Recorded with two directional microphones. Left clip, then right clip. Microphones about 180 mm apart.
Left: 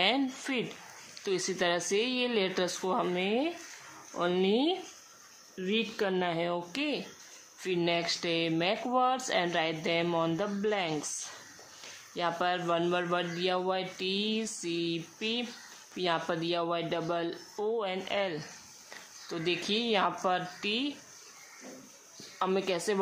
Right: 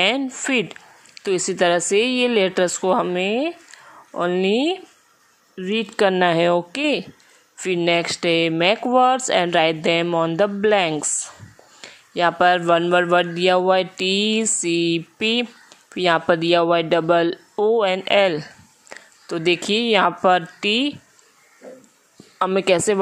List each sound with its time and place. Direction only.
0.0 s speech: 40° right (ahead or behind)
3.3 s a man's voice: 45° right (ahead or behind)
5.6 s a man's voice: 50° right (ahead or behind)
12.1 s a man's voice: 45° right (ahead or behind)
22.4 s speech: 40° right (ahead or behind)